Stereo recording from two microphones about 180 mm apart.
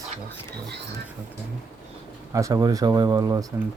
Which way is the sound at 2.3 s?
15° right (ahead or behind).